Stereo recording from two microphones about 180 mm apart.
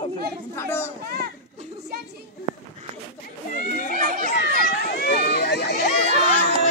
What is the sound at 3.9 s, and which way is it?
Crowd, 50° right (ahead or behind).